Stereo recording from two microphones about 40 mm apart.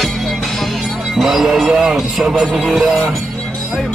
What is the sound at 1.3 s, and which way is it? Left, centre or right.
Speech, centre.